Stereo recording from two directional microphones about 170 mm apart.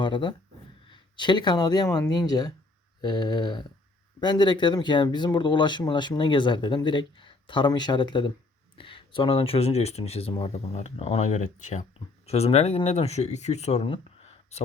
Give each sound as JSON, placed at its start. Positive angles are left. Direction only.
{"t": 0.0, "sound": "speech", "side_deg": 30}